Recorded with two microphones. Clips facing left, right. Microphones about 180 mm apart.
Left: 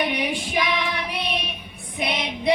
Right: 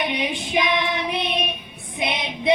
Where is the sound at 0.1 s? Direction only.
20° right (ahead or behind).